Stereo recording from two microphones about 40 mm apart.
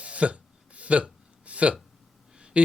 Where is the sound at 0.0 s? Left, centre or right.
Right.